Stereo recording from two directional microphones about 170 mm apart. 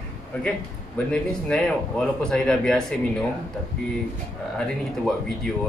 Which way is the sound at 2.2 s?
5° left (ahead or behind).